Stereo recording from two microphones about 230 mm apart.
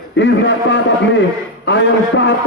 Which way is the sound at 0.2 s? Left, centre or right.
Left.